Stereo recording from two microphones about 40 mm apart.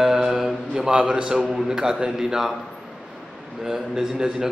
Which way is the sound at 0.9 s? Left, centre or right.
Right.